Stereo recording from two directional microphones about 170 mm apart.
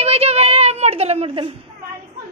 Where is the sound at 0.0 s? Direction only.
40° right (ahead or behind).